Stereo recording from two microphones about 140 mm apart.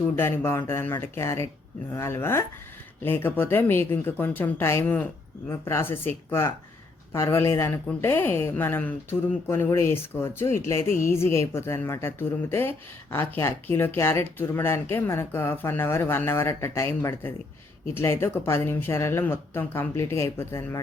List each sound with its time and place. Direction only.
0.2 s a woman's voice: 15° left (ahead or behind)